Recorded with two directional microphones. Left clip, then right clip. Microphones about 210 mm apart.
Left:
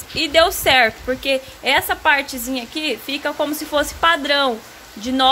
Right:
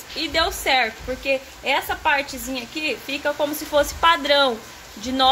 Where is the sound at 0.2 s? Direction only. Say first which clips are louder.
Left 7 dB; 30° left (ahead or behind).